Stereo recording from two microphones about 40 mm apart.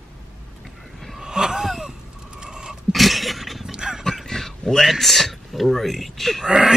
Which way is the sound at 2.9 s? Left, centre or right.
Centre.